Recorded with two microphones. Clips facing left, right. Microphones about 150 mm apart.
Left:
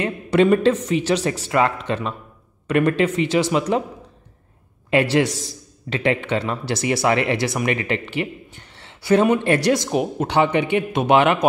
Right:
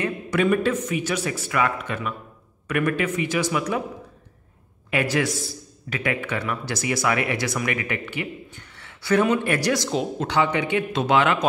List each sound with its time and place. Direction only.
0.0 s speech: 30° left (ahead or behind)
4.9 s speech: 30° left (ahead or behind)